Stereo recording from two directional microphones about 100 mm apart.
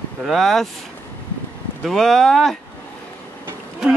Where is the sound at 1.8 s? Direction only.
Centre (ahead or behind).